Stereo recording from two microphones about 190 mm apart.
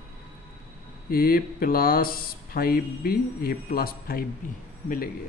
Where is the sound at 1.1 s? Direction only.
50° left (ahead or behind).